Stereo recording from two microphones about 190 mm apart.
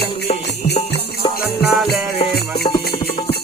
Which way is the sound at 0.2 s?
55° left (ahead or behind).